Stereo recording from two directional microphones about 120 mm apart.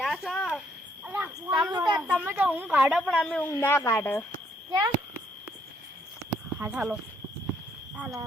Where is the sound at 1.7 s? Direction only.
35° right (ahead or behind).